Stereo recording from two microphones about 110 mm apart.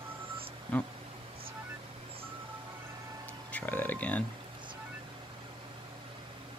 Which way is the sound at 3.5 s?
15° left (ahead or behind).